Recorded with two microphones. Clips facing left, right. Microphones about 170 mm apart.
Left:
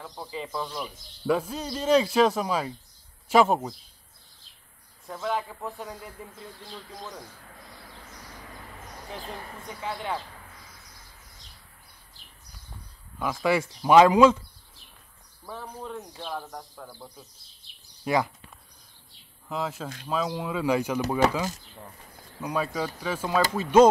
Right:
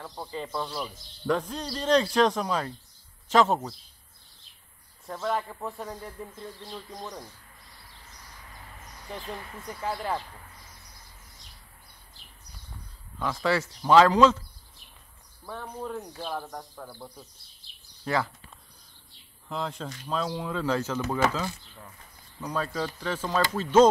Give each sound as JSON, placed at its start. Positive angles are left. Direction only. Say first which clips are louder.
{"t": 0.0, "sound": "speech", "louder": "even", "side_deg": 0}
{"t": 1.2, "sound": "speech", "louder": "left 2 dB", "side_deg": 5}
{"t": 5.0, "sound": "speech", "louder": "even", "side_deg": 0}
{"t": 7.5, "sound": "a sound", "louder": "left 7 dB", "side_deg": 90}
{"t": 9.7, "sound": "speech", "louder": "right 2 dB", "side_deg": 0}
{"t": 13.2, "sound": "speech", "louder": "left 2 dB", "side_deg": 10}
{"t": 15.4, "sound": "speech", "louder": "right 2 dB", "side_deg": 0}
{"t": 18.0, "sound": "speech", "louder": "left 3 dB", "side_deg": 15}
{"t": 19.5, "sound": "speech", "louder": "left 2 dB", "side_deg": 5}
{"t": 22.4, "sound": "speech", "louder": "left 2 dB", "side_deg": 10}